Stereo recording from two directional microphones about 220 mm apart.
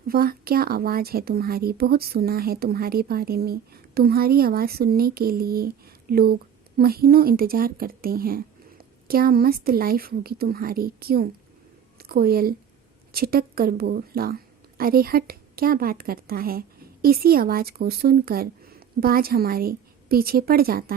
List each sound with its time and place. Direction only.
0.1 s a woman's voice: 40° right (ahead or behind)